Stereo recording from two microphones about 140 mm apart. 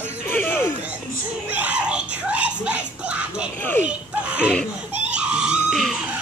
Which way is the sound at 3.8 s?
10° right (ahead or behind).